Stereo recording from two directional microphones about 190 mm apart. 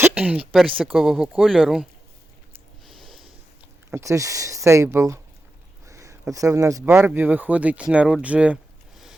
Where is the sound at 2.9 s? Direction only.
Centre (ahead or behind).